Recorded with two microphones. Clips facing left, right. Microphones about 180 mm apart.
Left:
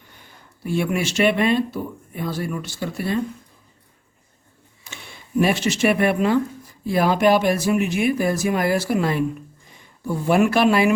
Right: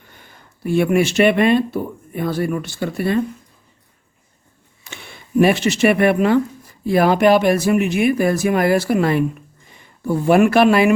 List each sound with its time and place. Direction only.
0.2 s speech: 55° right (ahead or behind)
5.4 s speech: 60° right (ahead or behind)